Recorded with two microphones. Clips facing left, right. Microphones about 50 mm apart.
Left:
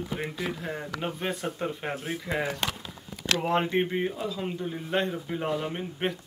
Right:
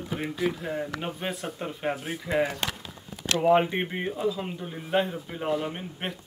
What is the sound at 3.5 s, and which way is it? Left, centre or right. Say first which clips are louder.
Speech: right 4 dB; centre.